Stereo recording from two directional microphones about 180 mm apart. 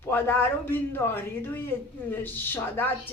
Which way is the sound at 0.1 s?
10° left (ahead or behind).